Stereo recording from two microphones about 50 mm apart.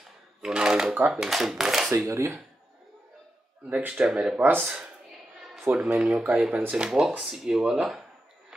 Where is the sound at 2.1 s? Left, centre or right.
Right.